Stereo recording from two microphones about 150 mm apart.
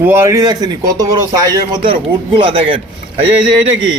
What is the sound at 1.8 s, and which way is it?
Speech, 35° right (ahead or behind).